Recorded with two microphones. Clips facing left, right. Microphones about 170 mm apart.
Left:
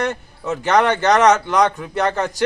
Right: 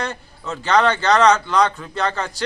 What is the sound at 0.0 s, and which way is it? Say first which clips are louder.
A man's voice: left 5 dB; 20° left (ahead or behind).